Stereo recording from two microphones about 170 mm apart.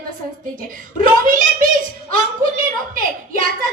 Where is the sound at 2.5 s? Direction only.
50° right (ahead or behind).